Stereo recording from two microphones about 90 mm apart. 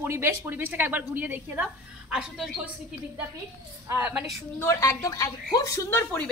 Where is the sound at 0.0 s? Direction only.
25° right (ahead or behind).